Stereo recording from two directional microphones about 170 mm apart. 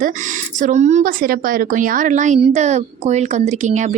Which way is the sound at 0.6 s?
45° right (ahead or behind).